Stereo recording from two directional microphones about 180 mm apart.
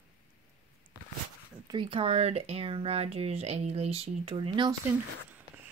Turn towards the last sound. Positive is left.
turn(degrees=-30)  # may be behind; listen again after turning